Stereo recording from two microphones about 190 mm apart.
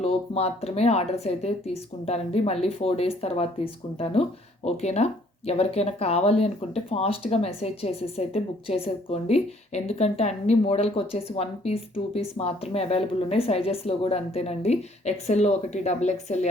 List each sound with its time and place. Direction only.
0.0 s speech: 30° left (ahead or behind)